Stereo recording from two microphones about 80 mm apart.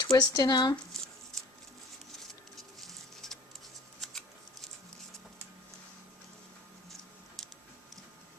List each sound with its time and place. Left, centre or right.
0.0 s speech: left
2.1 s patter: centre